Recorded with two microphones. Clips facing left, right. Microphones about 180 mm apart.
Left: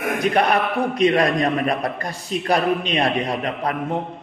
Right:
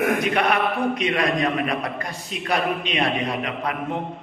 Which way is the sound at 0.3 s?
40° left (ahead or behind).